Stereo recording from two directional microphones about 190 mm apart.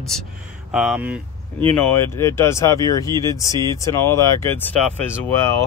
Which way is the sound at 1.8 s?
10° left (ahead or behind).